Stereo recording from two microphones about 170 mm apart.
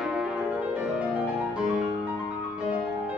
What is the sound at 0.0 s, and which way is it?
Music, centre (ahead or behind).